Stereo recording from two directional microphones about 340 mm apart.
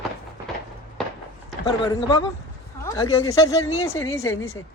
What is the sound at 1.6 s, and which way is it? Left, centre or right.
Speech, centre.